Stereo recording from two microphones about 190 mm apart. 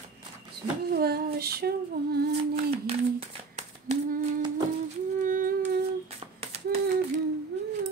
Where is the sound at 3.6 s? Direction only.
35° right (ahead or behind).